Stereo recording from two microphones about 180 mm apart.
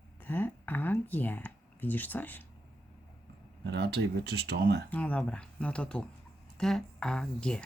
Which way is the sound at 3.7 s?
65° right (ahead or behind).